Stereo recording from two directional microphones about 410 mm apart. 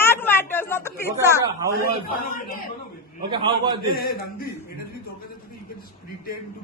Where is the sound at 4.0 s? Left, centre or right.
Left.